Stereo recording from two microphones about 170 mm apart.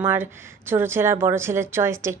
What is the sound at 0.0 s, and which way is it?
A woman's voice, 15° right (ahead or behind).